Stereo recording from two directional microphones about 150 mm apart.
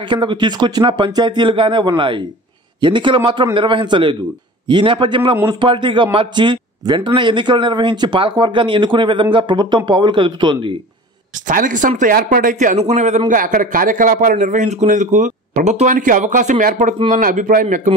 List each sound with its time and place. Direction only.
0.1 s speech: 30° right (ahead or behind)
11.4 s a man's voice: 60° right (ahead or behind)
13.3 s a man's voice: 60° right (ahead or behind)